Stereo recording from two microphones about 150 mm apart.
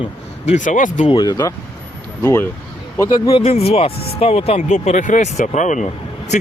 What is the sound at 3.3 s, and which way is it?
Speech, 40° left (ahead or behind).